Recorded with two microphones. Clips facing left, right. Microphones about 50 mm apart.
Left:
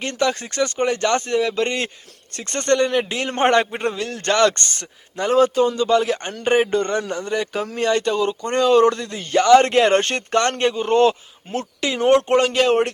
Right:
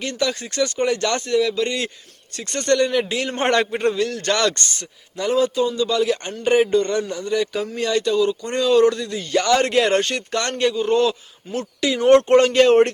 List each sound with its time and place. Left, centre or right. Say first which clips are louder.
0.0 s a man's voice: left 2 dB; left
10.0 s a man's voice: left 4 dB; left
12.5 s speech: right 4 dB; centre